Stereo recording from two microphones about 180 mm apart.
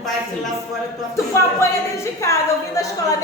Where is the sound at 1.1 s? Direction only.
15° left (ahead or behind).